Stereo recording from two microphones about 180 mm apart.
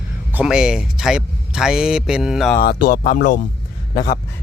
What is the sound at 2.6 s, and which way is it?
Speech, 50° left (ahead or behind).